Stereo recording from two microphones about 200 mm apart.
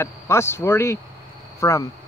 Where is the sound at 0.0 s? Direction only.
15° left (ahead or behind).